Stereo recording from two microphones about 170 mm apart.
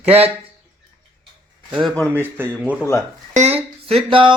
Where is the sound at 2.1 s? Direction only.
10° right (ahead or behind).